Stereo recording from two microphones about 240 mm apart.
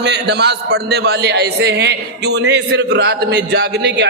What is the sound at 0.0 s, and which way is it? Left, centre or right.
A man's voice, right.